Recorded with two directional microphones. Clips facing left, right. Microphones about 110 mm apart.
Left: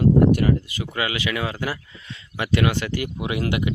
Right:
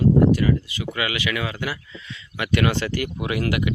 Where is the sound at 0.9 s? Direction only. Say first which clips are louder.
Left 1 dB; 30° left (ahead or behind).